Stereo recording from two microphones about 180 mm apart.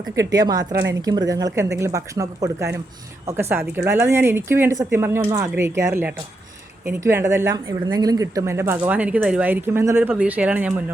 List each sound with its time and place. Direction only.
0.2 s speech: 20° right (ahead or behind)